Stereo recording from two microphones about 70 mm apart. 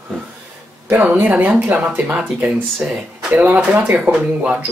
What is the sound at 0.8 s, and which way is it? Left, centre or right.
Speech, right.